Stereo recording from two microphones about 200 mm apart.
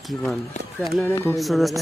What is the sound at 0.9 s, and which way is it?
Speech, 10° left (ahead or behind).